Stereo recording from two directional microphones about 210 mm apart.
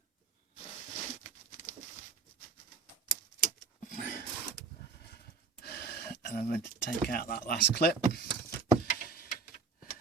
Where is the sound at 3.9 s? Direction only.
40° left (ahead or behind).